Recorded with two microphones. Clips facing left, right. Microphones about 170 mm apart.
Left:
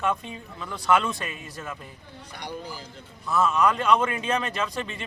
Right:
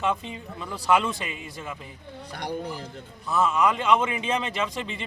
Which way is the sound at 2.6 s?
65° right (ahead or behind).